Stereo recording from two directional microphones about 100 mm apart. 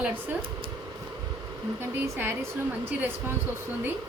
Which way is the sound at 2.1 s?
20° right (ahead or behind).